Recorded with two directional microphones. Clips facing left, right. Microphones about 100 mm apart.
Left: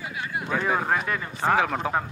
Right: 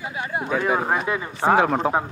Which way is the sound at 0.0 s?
25° right (ahead or behind).